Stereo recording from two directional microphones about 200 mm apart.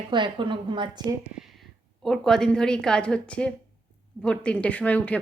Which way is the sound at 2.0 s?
Centre (ahead or behind).